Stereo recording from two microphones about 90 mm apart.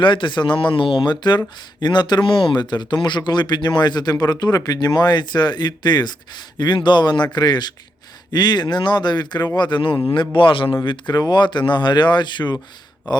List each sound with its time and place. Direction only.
0.0 s a man's voice: 65° left (ahead or behind)